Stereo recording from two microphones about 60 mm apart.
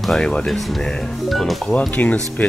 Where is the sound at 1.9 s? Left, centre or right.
Left.